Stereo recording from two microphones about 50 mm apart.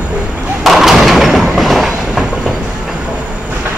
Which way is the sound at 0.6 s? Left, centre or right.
Centre.